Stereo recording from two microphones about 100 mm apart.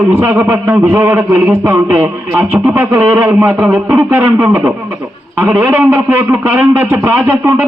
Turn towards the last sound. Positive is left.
turn(degrees=-20)  # may be behind; listen again after turning